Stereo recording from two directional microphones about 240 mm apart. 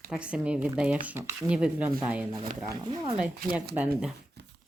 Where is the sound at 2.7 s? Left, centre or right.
Centre.